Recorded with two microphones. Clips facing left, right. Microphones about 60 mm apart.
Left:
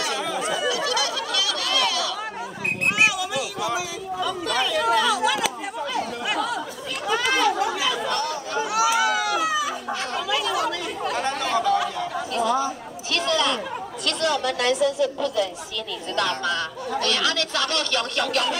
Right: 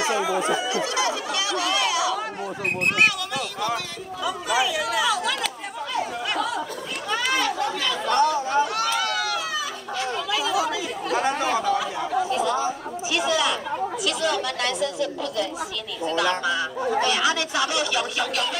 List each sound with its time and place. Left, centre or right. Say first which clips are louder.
0.4 s a sound: right 1 dB; right
3.0 s speech: left 1 dB; centre
4.2 s speech: right 2 dB; centre
4.9 s a sound: left 2 dB; centre
5.9 s chatter: right 1 dB; centre
7.1 s speech: left 3 dB; centre
8.1 s speech: right 6 dB; right
8.7 s a sound: left 4 dB; centre
11.2 s speech: left 1 dB; centre
12.5 s speech: even; centre